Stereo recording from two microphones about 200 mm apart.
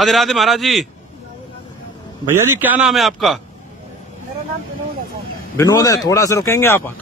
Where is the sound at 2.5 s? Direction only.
10° right (ahead or behind).